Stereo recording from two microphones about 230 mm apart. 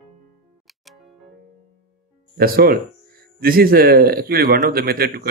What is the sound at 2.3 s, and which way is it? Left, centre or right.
Speech, right.